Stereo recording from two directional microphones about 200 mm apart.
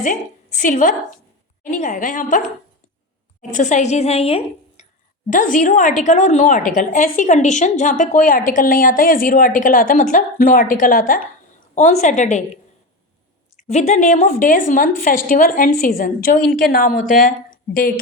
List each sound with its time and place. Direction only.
0.0 s a woman's voice: 40° left (ahead or behind)
3.5 s a woman's voice: 35° left (ahead or behind)
5.3 s a woman's voice: 40° left (ahead or behind)
13.6 s a woman's voice: 35° left (ahead or behind)